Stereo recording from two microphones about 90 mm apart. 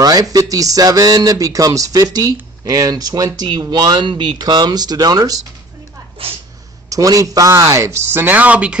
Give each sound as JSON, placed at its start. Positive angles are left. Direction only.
{"t": 0.0, "sound": "speech", "side_deg": -45}
{"t": 6.9, "sound": "speech", "side_deg": -40}